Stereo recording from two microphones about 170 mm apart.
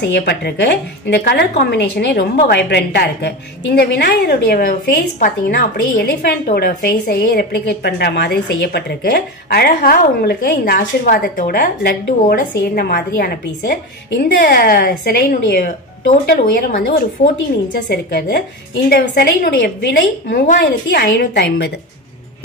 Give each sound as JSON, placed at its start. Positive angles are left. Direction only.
{"t": 0.0, "sound": "a woman's voice", "side_deg": 85}